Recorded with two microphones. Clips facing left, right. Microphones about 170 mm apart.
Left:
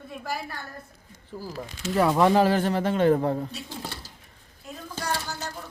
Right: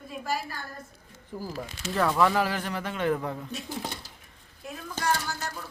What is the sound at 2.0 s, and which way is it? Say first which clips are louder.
A man's voice: left 4 dB; 20° left (ahead or behind).